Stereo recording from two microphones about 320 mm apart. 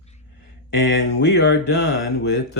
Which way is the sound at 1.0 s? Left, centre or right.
Left.